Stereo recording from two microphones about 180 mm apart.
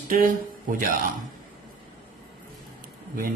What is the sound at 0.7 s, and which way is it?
Speech, 50° right (ahead or behind).